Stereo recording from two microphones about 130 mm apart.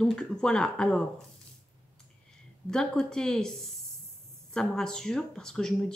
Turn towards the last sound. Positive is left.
turn(degrees=5)  # may be behind; listen again after turning